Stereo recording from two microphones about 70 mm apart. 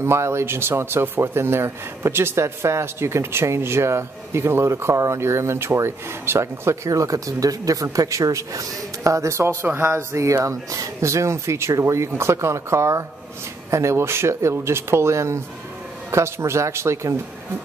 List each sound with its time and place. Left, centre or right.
0.0 s speech: right